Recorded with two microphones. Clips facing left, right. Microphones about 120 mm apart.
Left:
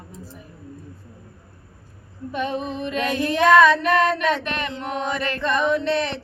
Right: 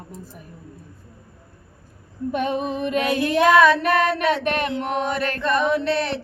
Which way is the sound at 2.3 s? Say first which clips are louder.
Right 3 dB; 50° right (ahead or behind).